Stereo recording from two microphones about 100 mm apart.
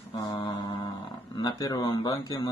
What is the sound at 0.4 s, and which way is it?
Mantra, 50° left (ahead or behind).